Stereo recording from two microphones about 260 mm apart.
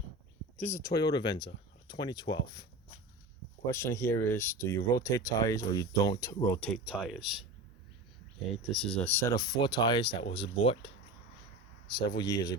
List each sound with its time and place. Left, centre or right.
0.6 s speech: centre
3.7 s speech: centre
8.4 s speech: centre